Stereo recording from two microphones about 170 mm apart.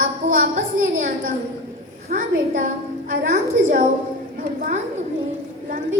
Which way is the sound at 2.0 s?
50° right (ahead or behind).